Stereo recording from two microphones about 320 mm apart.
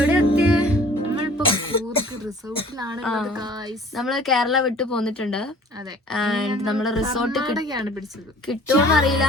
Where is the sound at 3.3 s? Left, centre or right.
Centre.